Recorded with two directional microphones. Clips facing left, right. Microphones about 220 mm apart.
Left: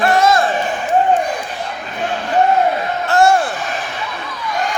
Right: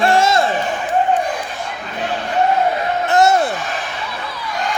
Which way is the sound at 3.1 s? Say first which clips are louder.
Left 1 dB; 20° right (ahead or behind).